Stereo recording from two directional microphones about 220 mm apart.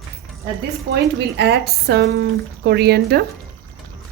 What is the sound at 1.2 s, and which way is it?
Speech, 50° right (ahead or behind).